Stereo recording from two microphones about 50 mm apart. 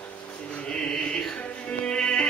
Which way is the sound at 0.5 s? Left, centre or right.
Centre.